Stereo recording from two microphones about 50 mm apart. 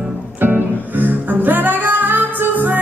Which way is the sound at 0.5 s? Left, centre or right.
Right.